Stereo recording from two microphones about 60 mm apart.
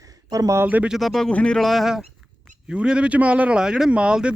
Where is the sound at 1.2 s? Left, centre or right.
Centre.